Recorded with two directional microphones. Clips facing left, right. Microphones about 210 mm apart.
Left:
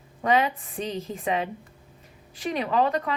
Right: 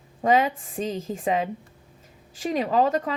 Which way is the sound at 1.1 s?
30° right (ahead or behind).